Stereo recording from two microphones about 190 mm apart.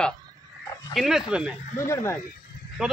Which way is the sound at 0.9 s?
Centre (ahead or behind).